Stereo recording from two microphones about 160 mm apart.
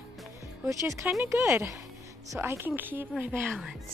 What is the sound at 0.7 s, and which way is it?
A woman's voice, 20° right (ahead or behind).